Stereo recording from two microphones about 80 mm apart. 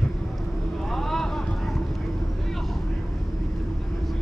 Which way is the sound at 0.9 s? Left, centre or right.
Centre.